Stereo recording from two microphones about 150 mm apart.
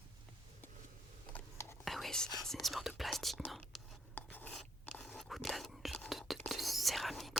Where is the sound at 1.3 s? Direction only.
15° left (ahead or behind).